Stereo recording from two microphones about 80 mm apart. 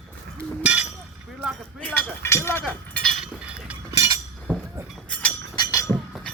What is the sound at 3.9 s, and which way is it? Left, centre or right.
Chink, right.